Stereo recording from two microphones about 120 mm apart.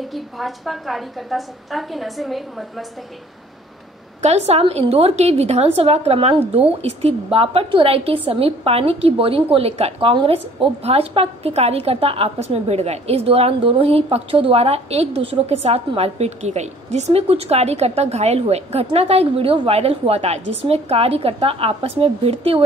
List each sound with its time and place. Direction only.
0.1 s a woman's voice: centre (ahead or behind)
4.2 s a woman's voice: 60° right (ahead or behind)